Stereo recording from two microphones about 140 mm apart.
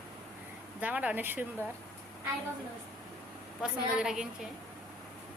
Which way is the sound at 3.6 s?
5° right (ahead or behind).